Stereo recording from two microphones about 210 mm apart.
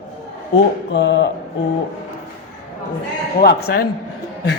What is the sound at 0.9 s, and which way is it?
Speech, 60° left (ahead or behind).